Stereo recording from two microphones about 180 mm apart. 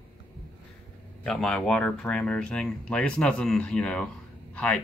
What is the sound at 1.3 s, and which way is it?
Speech, 5° left (ahead or behind).